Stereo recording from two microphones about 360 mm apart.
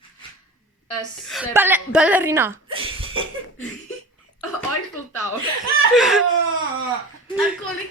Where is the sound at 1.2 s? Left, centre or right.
Centre.